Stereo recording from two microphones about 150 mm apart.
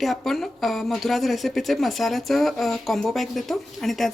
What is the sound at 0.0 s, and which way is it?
Speech, centre (ahead or behind).